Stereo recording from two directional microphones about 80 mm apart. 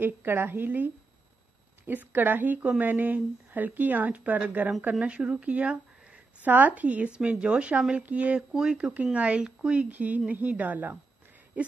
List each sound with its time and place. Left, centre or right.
0.0 s speech: right